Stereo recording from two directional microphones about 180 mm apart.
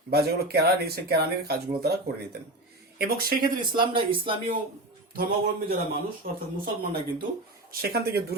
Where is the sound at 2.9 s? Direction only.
55° right (ahead or behind).